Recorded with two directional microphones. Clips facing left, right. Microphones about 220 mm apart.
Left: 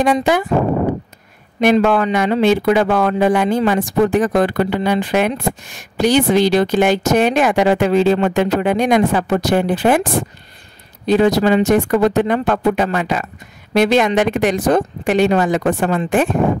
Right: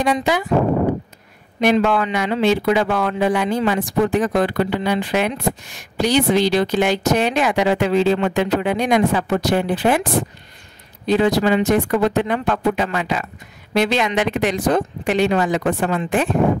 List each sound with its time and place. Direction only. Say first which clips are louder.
0.0 s a woman's voice: left 4 dB; 50° left (ahead or behind)
1.6 s a woman's voice: left 3 dB; 50° left (ahead or behind)
11.1 s a woman's voice: left 3 dB; 45° left (ahead or behind)